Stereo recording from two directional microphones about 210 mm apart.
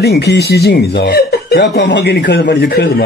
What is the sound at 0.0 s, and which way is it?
Speech, 50° left (ahead or behind).